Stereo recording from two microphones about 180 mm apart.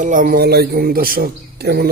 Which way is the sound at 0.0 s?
45° right (ahead or behind).